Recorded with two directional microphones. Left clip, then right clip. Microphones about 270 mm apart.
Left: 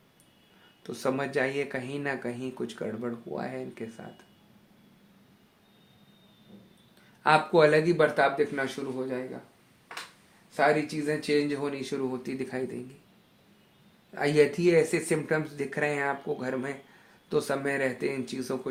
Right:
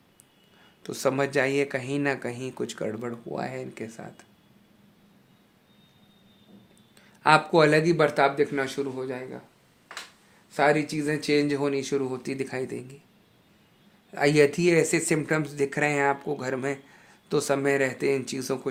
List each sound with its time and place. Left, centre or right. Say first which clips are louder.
0.8 s speech: right 5 dB; right
7.2 s speech: right 2 dB; right
10.5 s speech: right 2 dB; right
14.2 s speech: right 3 dB; right